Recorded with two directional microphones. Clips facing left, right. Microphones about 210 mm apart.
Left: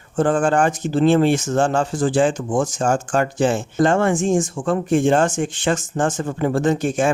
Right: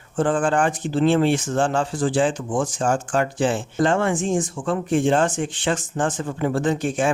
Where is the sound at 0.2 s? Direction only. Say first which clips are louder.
Left 3 dB; 45° left (ahead or behind).